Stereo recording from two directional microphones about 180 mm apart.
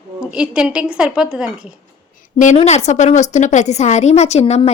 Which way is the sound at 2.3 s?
40° left (ahead or behind).